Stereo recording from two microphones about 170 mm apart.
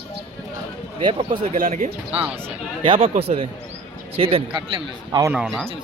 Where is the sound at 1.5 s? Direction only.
55° right (ahead or behind).